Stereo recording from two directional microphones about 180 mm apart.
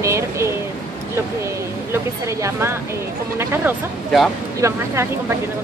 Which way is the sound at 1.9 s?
15° right (ahead or behind).